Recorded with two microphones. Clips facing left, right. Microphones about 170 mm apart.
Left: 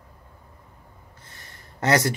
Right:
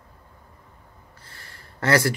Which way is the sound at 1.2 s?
20° left (ahead or behind).